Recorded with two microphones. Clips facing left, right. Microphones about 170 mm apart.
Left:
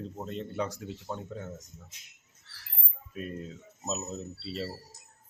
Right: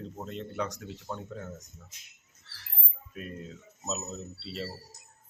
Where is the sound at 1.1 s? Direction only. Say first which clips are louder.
Even; centre (ahead or behind).